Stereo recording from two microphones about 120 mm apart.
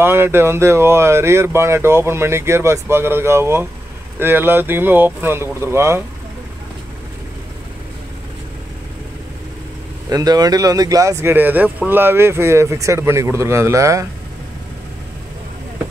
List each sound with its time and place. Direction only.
0.0 s speech: 20° right (ahead or behind)
10.0 s speech: 30° right (ahead or behind)
11.3 s speech: 15° right (ahead or behind)